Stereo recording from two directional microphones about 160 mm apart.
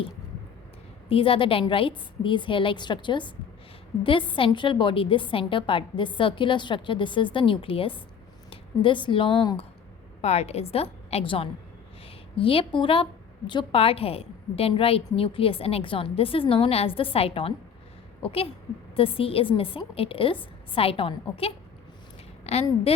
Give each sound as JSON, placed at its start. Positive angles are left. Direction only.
{"t": 1.1, "sound": "a woman's voice", "side_deg": 35}
{"t": 10.2, "sound": "a woman's voice", "side_deg": 40}
{"t": 22.6, "sound": "a woman's voice", "side_deg": 40}